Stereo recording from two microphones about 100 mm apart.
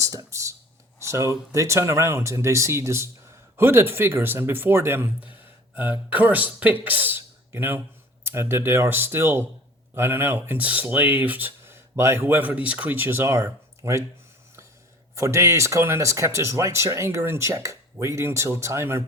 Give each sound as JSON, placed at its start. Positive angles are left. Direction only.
{"t": 0.0, "sound": "a sound", "side_deg": -35}
{"t": 0.9, "sound": "speech", "side_deg": -30}
{"t": 15.1, "sound": "speech", "side_deg": -30}